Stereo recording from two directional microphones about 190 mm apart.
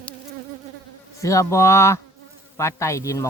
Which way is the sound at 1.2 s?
15° left (ahead or behind).